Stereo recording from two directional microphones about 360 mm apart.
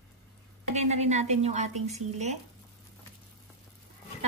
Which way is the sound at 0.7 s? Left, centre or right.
Centre.